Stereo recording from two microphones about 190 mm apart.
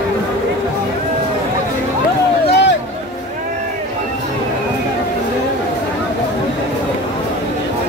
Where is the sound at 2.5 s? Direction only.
65° left (ahead or behind).